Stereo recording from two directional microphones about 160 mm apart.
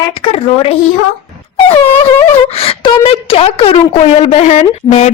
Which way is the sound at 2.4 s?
35° left (ahead or behind).